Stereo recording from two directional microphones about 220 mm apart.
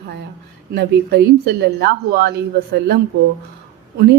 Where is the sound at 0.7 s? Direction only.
50° right (ahead or behind).